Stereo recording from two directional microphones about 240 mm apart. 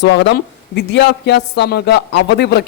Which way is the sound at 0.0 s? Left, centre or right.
Left.